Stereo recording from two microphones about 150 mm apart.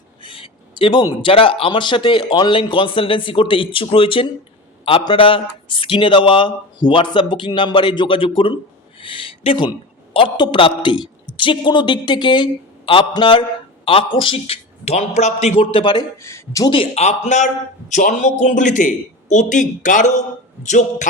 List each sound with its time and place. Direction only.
0.2 s a man's voice: 35° left (ahead or behind)
16.2 s speech: 20° left (ahead or behind)
16.7 s a man's voice: 40° left (ahead or behind)